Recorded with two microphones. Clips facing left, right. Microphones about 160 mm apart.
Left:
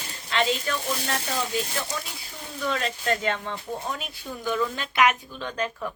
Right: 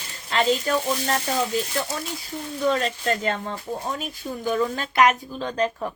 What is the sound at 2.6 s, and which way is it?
Speech, 35° right (ahead or behind).